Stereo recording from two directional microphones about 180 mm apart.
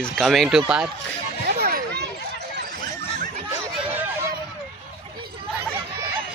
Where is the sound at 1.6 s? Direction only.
60° right (ahead or behind).